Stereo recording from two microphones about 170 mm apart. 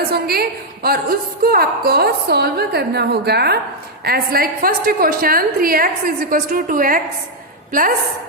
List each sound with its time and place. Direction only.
0.0 s a woman's voice: 65° right (ahead or behind)